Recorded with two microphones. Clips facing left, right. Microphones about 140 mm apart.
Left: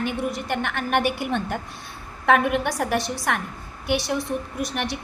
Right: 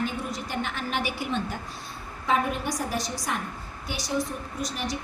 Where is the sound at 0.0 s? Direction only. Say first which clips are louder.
Left 4 dB; 60° left (ahead or behind).